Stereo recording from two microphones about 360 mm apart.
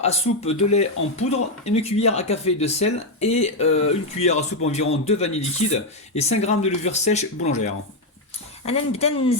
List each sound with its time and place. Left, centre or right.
0.0 s speech: centre